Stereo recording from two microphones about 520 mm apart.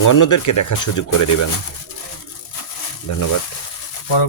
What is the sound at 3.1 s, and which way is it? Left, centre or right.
Speech, left.